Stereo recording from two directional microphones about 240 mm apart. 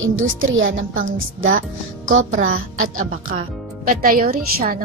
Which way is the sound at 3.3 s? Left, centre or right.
Right.